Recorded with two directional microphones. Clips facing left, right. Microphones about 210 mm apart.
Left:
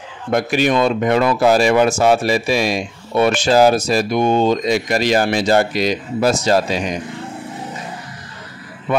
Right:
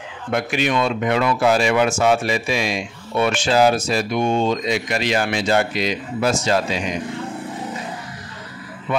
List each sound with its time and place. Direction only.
0.3 s speech: 40° left (ahead or behind)